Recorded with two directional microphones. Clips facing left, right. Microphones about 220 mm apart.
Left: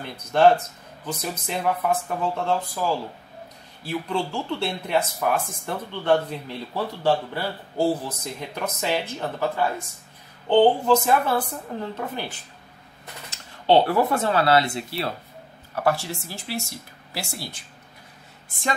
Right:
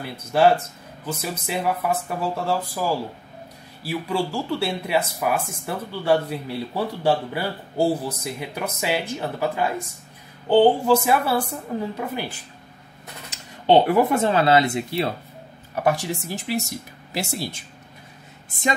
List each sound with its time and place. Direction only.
0.0 s speech: 5° right (ahead or behind)
3.8 s speech: 5° right (ahead or behind)